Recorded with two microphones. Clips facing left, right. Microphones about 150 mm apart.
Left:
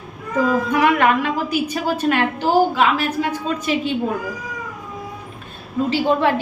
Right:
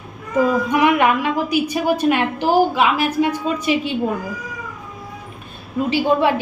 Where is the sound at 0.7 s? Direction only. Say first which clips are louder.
Right 1 dB; 15° right (ahead or behind).